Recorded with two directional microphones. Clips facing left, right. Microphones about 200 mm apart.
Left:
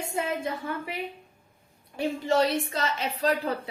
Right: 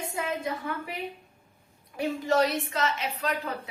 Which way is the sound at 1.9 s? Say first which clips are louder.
Left 1 dB; 30° left (ahead or behind).